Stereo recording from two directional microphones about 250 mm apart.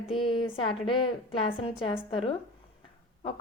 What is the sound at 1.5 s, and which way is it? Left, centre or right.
Speech, left.